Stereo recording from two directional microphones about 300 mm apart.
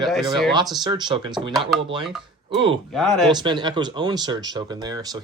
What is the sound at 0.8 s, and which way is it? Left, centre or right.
Speech, centre.